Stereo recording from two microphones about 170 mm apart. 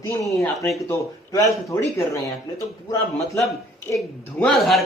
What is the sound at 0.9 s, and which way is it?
Speech, 20° left (ahead or behind).